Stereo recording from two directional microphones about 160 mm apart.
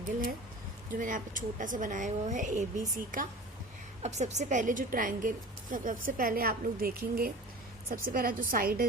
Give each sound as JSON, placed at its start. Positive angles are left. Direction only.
{"t": 0.9, "sound": "a woman's voice", "side_deg": -55}
{"t": 4.0, "sound": "a woman's voice", "side_deg": -45}